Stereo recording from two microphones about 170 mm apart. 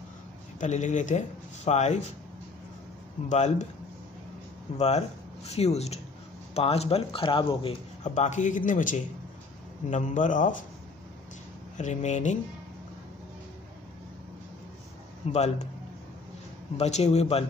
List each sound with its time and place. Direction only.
0.6 s speech: 45° left (ahead or behind)
3.3 s speech: 40° left (ahead or behind)
4.7 s speech: 40° left (ahead or behind)
8.0 s speech: 45° left (ahead or behind)
11.7 s speech: 45° left (ahead or behind)
15.3 s speech: 40° left (ahead or behind)
16.7 s speech: 40° left (ahead or behind)